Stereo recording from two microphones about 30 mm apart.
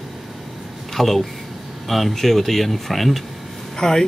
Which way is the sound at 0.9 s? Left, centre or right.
Centre.